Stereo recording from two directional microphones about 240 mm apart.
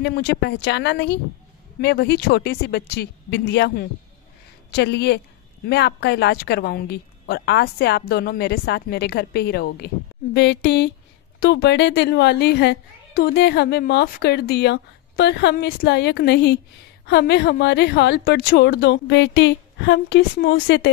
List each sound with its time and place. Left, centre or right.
0.0 s a woman's voice: left